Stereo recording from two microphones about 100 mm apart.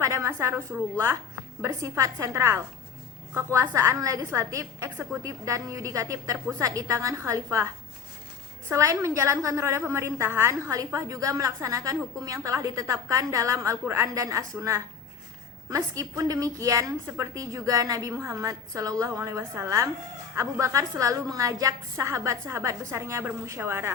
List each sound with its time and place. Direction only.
0.0 s a sound: 30° right (ahead or behind)
0.9 s a woman's voice: 25° right (ahead or behind)
8.7 s a woman's voice: 30° right (ahead or behind)